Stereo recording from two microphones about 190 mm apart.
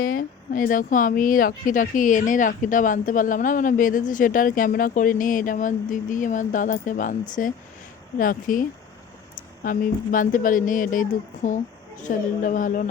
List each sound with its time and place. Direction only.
0.0 s speech: 45° left (ahead or behind)
9.6 s speech: 45° left (ahead or behind)